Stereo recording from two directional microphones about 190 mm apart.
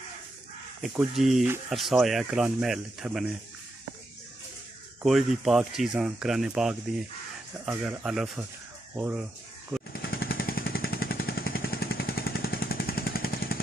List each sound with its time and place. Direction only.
0.9 s speech: centre (ahead or behind)
5.0 s speech: centre (ahead or behind)
9.9 s a sound: 55° left (ahead or behind)